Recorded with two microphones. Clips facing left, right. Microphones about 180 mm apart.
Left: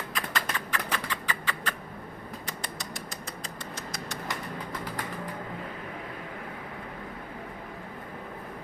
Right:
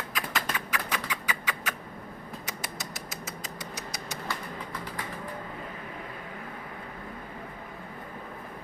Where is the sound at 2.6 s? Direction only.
5° right (ahead or behind).